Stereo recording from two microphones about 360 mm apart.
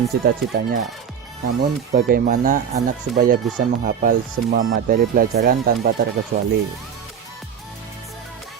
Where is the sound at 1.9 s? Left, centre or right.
Right.